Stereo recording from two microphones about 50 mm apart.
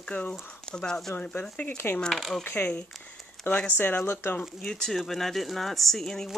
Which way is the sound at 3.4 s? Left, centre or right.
Centre.